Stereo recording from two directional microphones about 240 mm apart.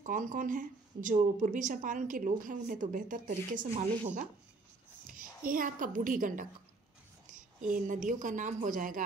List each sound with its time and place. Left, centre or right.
0.0 s a woman's voice: right